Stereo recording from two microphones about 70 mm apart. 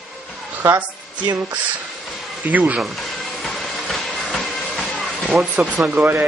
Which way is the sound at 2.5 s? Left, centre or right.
Right.